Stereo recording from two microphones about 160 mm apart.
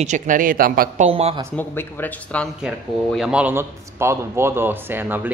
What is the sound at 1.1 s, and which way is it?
Speech, 40° right (ahead or behind).